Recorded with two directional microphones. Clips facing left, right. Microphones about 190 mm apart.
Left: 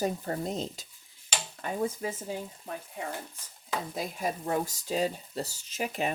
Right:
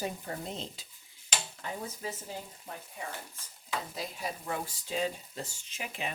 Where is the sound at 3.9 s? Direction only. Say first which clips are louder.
Left 5 dB; 45° left (ahead or behind).